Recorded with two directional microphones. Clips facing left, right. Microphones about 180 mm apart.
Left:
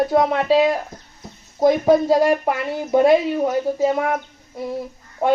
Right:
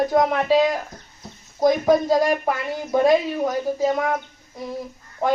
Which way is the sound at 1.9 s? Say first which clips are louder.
Left 3 dB; 30° left (ahead or behind).